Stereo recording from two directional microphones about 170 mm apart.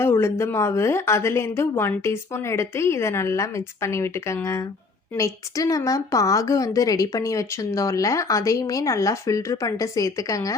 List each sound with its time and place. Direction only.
0.0 s a woman's voice: 15° left (ahead or behind)